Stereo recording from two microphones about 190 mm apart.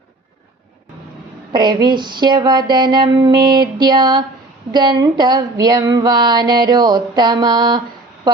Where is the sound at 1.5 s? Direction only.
25° right (ahead or behind).